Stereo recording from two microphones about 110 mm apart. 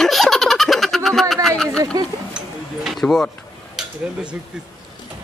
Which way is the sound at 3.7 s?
10° right (ahead or behind).